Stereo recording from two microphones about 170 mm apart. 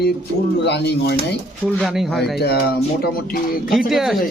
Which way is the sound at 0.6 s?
90° left.